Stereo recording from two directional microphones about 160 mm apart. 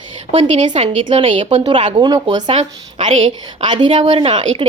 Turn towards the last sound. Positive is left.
turn(degrees=-35)  # may be behind; listen again after turning